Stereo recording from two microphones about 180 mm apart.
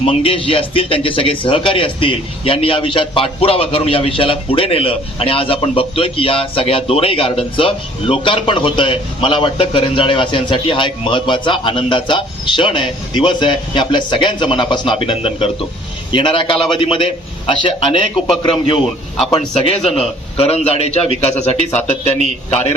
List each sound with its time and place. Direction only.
0.0 s a man's voice: 30° left (ahead or behind)
19.3 s a man's voice: 35° left (ahead or behind)